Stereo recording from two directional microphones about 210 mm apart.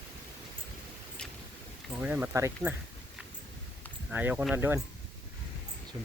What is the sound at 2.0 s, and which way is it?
Speech, 5° right (ahead or behind).